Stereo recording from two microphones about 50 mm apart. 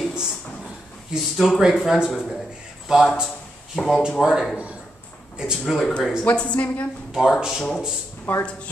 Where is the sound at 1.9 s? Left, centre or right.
Centre.